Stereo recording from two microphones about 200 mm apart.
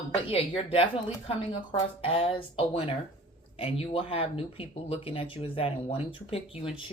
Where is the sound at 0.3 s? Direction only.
30° left (ahead or behind).